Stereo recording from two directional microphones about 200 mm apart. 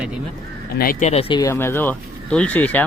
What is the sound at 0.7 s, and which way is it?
Speech, 45° left (ahead or behind).